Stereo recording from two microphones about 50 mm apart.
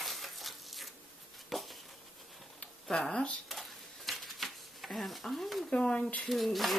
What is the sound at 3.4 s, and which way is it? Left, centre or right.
Typewriter, centre.